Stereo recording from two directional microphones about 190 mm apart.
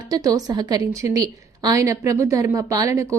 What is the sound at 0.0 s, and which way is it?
A woman's voice, 20° right (ahead or behind).